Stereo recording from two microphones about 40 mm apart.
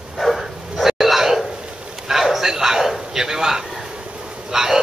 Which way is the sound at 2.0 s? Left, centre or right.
Centre.